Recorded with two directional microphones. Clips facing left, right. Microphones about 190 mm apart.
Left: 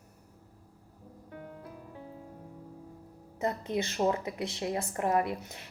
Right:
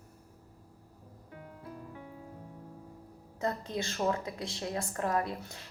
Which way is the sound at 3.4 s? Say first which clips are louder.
Left 3 dB; 20° left (ahead or behind).